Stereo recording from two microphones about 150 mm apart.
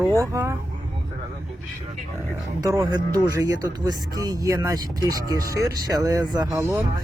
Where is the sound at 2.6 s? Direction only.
20° right (ahead or behind).